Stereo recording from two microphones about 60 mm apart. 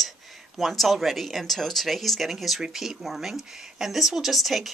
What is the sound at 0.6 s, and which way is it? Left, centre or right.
Speech, centre.